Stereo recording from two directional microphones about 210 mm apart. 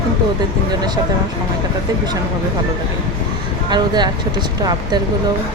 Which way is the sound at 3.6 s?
20° right (ahead or behind).